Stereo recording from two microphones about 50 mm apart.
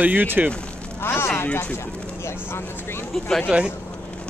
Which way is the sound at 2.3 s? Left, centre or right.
Left.